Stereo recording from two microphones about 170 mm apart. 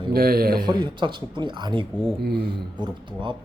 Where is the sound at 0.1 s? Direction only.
65° right (ahead or behind).